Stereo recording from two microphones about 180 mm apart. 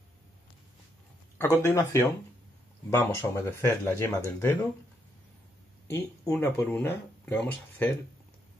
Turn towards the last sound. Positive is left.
turn(degrees=10)  # may be behind; listen again after turning